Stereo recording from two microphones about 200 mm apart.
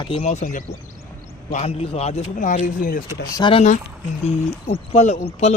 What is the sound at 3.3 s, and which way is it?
Speech, 25° left (ahead or behind).